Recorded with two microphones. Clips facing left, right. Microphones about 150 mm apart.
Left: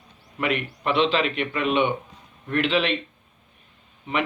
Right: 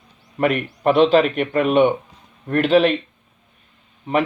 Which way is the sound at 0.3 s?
45° right (ahead or behind).